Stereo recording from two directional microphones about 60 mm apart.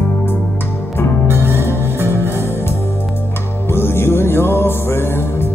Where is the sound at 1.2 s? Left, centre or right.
Right.